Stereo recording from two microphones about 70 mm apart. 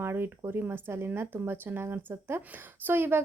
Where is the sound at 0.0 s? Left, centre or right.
Right.